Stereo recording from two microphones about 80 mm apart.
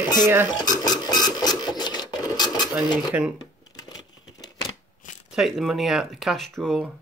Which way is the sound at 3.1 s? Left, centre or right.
Centre.